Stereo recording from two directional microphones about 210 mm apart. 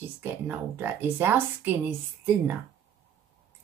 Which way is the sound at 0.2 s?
10° right (ahead or behind).